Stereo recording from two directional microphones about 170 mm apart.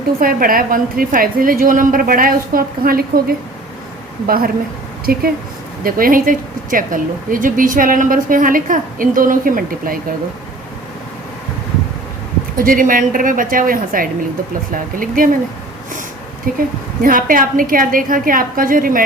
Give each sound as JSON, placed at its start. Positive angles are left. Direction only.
{"t": 0.2, "sound": "a woman's voice", "side_deg": -55}
{"t": 12.5, "sound": "a woman's voice", "side_deg": -55}
{"t": 16.6, "sound": "a woman's voice", "side_deg": -55}